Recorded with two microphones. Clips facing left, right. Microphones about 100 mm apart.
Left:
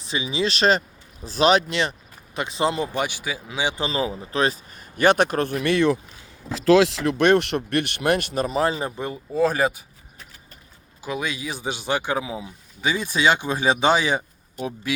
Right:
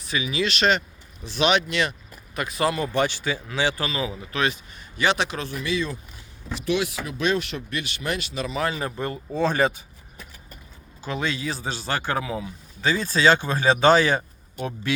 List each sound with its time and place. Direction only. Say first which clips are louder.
0.0 s speech: left 1 dB; 30° left (ahead or behind)
2.9 s speech: right 3 dB; 10° left (ahead or behind)
3.8 s speech: left 3 dB; 35° left (ahead or behind)
4.9 s speech: left 6 dB; 50° left (ahead or behind); by 6.0 s 70° left (ahead or behind)
6.7 s speech: left 9 dB; 90° left; by 8.5 s 50° left (ahead or behind)
8.5 s speech: left 3 dB; 30° left (ahead or behind)
9.0 s speech: left 3 dB; 5° left (ahead or behind)
11.0 s speech: right 1 dB; 10° left (ahead or behind)